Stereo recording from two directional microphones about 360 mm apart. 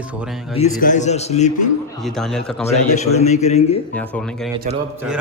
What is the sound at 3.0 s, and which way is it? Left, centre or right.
Speech, centre.